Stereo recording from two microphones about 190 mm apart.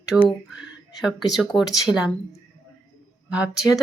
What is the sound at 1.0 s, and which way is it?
Speech, centre (ahead or behind).